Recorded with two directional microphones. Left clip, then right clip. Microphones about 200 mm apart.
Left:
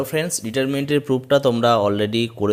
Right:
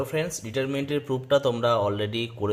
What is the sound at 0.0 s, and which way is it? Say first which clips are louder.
Speech: left 5 dB; 40° left (ahead or behind).